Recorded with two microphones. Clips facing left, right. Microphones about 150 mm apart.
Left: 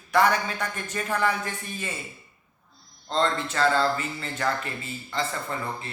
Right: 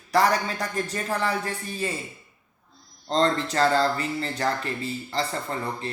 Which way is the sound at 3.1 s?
40° right (ahead or behind).